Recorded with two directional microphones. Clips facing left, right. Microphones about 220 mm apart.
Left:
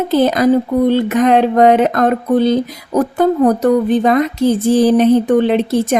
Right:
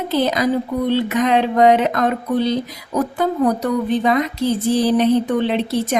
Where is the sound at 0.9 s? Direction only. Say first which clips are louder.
Left 3 dB; 50° left (ahead or behind).